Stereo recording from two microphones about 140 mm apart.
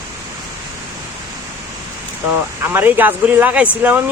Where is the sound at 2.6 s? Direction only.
15° right (ahead or behind).